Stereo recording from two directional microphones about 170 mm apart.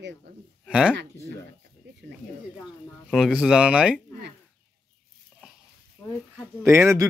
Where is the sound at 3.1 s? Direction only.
5° right (ahead or behind).